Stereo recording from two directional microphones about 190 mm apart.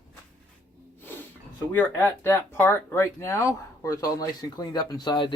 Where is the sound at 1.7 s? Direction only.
10° left (ahead or behind).